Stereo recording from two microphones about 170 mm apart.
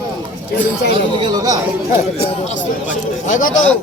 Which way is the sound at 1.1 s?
25° right (ahead or behind).